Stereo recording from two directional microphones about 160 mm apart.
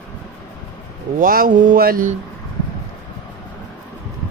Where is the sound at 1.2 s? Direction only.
60° right (ahead or behind).